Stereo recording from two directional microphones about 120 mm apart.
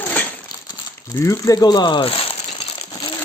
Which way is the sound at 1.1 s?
25° left (ahead or behind).